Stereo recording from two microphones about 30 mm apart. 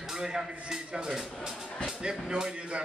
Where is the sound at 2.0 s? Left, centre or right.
Right.